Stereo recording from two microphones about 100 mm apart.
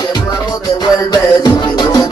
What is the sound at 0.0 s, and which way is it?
Music, 45° left (ahead or behind).